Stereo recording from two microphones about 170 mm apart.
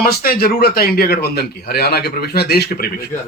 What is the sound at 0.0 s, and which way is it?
A man's voice, 60° left (ahead or behind).